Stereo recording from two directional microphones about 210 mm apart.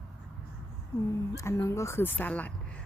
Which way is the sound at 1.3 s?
15° left (ahead or behind).